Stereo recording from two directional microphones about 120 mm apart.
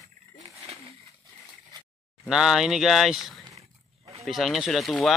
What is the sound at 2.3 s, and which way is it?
Speech, 5° right (ahead or behind).